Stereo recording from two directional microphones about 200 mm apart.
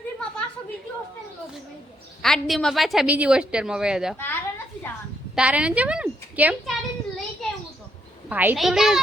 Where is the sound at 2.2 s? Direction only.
Centre (ahead or behind).